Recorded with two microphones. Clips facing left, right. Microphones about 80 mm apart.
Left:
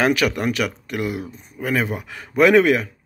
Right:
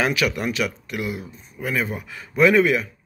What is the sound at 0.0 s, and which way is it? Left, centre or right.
Speech, left.